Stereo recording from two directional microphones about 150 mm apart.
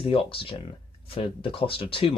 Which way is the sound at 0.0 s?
35° left (ahead or behind).